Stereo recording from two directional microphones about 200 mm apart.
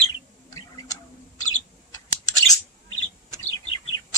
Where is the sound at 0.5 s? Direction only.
15° left (ahead or behind).